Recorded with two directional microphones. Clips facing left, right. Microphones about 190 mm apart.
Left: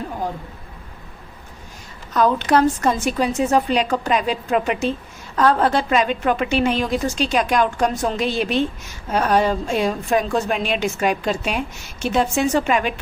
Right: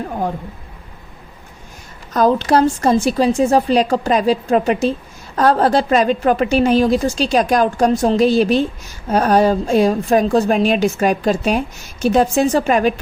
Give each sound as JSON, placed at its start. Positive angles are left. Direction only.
{"t": 2.1, "sound": "a woman's voice", "side_deg": -35}